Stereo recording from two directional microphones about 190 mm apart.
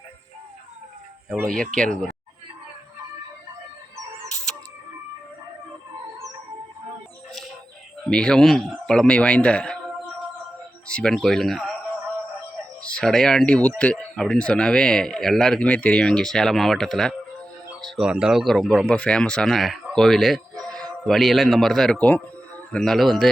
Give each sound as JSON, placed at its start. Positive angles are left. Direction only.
{"t": 1.7, "sound": "speech", "side_deg": 5}
{"t": 8.0, "sound": "speech", "side_deg": 5}
{"t": 10.8, "sound": "speech", "side_deg": 5}
{"t": 12.8, "sound": "speech", "side_deg": 5}